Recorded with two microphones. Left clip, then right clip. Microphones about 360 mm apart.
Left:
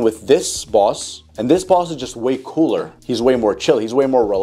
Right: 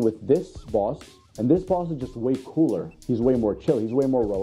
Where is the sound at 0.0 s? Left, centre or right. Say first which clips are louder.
Left 7 dB; centre.